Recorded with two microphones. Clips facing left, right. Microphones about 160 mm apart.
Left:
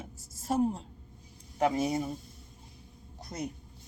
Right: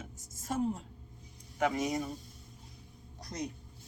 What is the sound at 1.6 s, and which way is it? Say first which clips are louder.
Speech: left 3 dB; 30° left (ahead or behind).